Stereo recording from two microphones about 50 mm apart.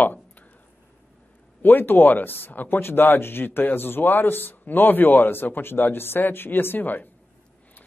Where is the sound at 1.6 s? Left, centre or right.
Left.